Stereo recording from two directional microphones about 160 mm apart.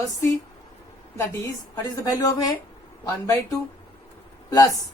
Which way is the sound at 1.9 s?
25° left (ahead or behind).